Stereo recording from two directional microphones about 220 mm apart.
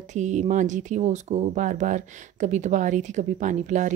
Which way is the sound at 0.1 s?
35° right (ahead or behind).